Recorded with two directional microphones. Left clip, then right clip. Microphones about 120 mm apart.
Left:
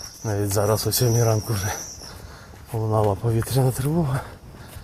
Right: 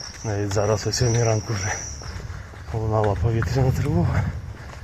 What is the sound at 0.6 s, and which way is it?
Speech, 25° left (ahead or behind).